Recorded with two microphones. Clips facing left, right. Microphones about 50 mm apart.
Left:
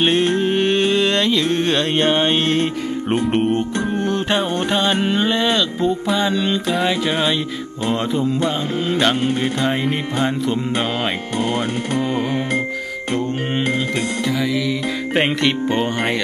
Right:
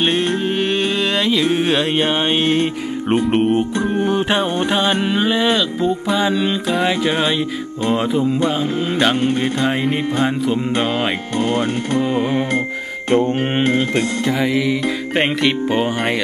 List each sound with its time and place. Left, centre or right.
0.0 s music: centre
11.3 s speech: centre
12.0 s music: centre
13.7 s music: right
15.1 s music: centre